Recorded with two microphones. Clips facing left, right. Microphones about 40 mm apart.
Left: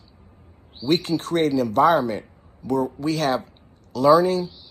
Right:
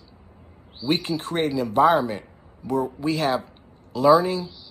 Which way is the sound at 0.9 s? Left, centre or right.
Centre.